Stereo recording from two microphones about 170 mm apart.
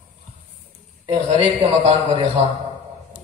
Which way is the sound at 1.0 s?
30° right (ahead or behind).